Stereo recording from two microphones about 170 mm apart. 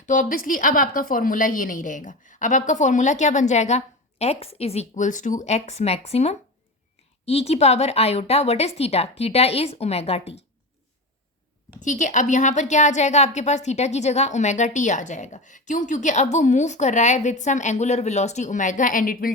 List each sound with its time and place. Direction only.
0.0 s a woman's voice: 50° left (ahead or behind)
11.8 s a woman's voice: 45° left (ahead or behind)